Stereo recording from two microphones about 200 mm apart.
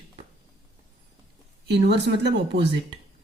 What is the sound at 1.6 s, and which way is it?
Speech, 60° right (ahead or behind).